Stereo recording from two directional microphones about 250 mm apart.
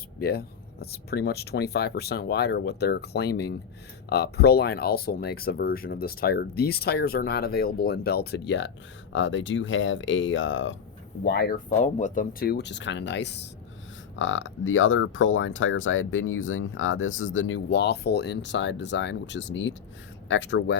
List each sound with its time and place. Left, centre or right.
0.2 s speech: left
11.8 s speech: left